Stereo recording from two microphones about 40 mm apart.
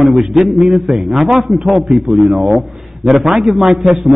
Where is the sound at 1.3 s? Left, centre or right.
Centre.